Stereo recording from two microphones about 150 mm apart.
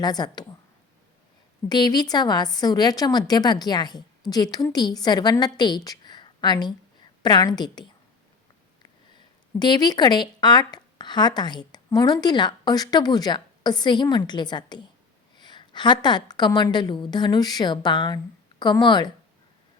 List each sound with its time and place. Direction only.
0.0 s speech: 25° left (ahead or behind)
1.7 s speech: 30° left (ahead or behind)
9.6 s speech: 30° left (ahead or behind)